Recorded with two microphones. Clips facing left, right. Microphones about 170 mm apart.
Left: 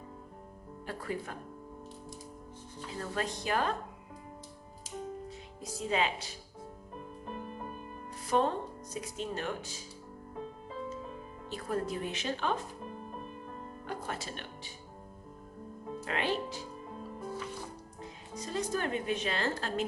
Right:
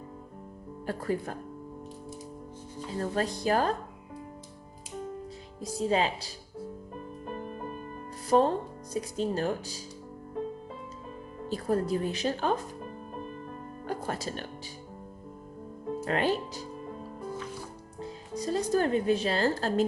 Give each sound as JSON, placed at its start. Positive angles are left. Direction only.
{"t": 0.9, "sound": "speech", "side_deg": -40}
{"t": 3.0, "sound": "speech", "side_deg": -35}
{"t": 5.8, "sound": "speech", "side_deg": -35}
{"t": 8.3, "sound": "speech", "side_deg": -35}
{"t": 11.4, "sound": "speech", "side_deg": -35}
{"t": 13.8, "sound": "music", "side_deg": -40}
{"t": 16.0, "sound": "speech", "side_deg": -40}
{"t": 18.0, "sound": "speech", "side_deg": -35}